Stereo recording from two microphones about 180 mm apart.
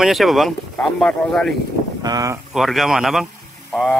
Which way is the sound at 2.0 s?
20° right (ahead or behind).